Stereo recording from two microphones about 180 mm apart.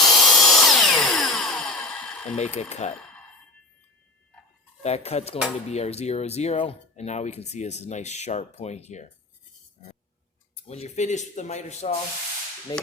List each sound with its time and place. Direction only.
0.0 s tools: centre (ahead or behind)
2.3 s speech: 40° left (ahead or behind)
4.8 s speech: 35° left (ahead or behind)
10.5 s speech: 35° left (ahead or behind)
12.7 s a sound: 20° left (ahead or behind)